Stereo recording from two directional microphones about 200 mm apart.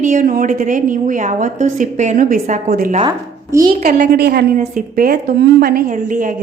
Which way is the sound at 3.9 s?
45° right (ahead or behind).